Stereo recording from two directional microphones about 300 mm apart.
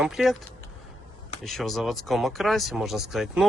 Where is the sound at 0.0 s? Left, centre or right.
Centre.